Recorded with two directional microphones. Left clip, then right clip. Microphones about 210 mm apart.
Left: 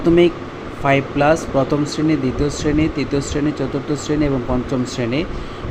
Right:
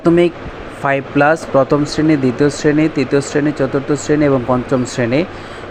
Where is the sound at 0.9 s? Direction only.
15° right (ahead or behind).